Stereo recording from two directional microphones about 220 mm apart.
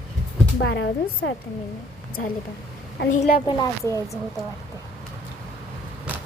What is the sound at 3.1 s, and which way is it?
Speech, 35° left (ahead or behind).